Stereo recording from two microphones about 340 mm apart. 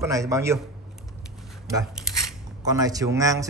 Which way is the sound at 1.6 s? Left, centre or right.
Centre.